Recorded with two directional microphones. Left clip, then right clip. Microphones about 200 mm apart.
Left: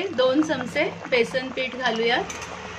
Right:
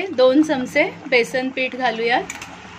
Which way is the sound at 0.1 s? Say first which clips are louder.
Right 7 dB; 35° right (ahead or behind).